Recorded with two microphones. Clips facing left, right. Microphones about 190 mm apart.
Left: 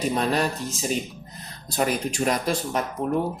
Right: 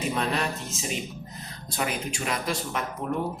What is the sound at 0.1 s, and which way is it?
Speech, 40° left (ahead or behind).